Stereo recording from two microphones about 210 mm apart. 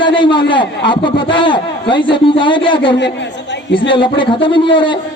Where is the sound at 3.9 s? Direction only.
25° left (ahead or behind).